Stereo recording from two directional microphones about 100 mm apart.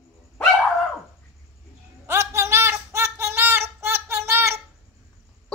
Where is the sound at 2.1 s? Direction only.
25° right (ahead or behind).